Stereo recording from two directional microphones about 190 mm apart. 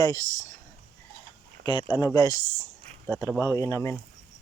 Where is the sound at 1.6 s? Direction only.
25° left (ahead or behind).